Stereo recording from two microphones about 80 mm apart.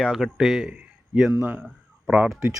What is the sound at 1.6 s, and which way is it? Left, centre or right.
Speech, centre.